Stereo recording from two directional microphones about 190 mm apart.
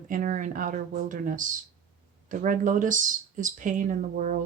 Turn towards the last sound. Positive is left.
turn(degrees=-45)  # may be behind; listen again after turning